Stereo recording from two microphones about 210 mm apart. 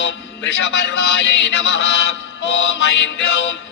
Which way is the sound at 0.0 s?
55° left (ahead or behind).